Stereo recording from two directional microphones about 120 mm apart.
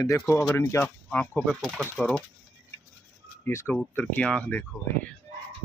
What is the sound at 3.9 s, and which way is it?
Speech, 10° left (ahead or behind).